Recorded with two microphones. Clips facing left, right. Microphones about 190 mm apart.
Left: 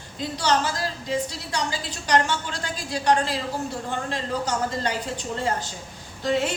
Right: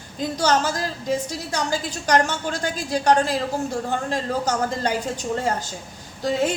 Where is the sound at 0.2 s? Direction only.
45° right (ahead or behind).